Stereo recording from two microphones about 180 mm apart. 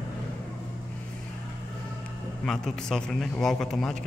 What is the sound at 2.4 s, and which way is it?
A man's voice, 5° left (ahead or behind).